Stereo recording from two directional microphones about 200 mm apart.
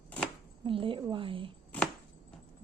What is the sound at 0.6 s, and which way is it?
Speech, 25° right (ahead or behind).